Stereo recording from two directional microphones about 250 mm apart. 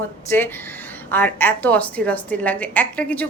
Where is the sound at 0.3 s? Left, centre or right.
Centre.